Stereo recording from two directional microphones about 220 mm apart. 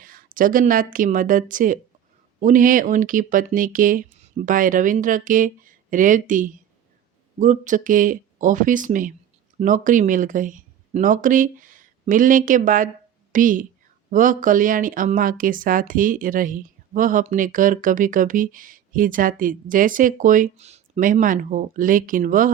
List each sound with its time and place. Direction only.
0.0 s speech: 40° right (ahead or behind)